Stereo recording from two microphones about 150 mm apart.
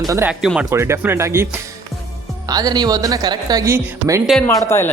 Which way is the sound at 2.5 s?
25° right (ahead or behind).